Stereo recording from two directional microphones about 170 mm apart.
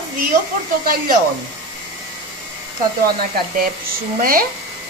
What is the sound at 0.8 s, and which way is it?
Speech, 60° right (ahead or behind).